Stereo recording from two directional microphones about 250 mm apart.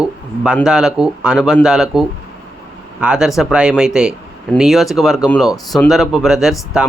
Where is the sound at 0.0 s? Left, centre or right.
Centre.